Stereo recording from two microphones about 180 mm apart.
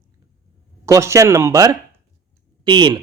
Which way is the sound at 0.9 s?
15° right (ahead or behind).